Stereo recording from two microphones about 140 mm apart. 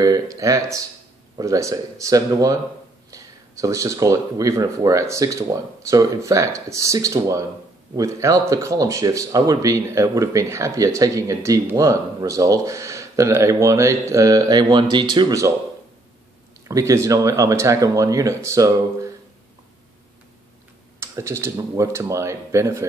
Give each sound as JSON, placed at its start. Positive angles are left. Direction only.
{"t": 0.0, "sound": "speech", "side_deg": -25}
{"t": 16.6, "sound": "speech", "side_deg": -25}
{"t": 21.0, "sound": "speech", "side_deg": -20}